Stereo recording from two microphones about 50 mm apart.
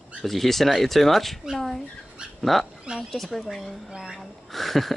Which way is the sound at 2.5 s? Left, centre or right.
Centre.